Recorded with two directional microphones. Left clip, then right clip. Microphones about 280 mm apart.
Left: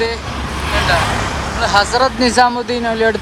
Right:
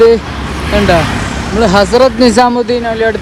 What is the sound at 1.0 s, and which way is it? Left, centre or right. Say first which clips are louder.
Vehicle: right 2 dB; left.